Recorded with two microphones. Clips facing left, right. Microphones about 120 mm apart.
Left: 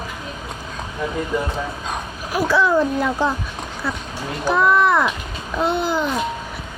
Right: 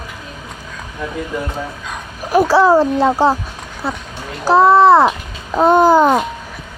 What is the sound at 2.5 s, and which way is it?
A child's voice, 35° right (ahead or behind).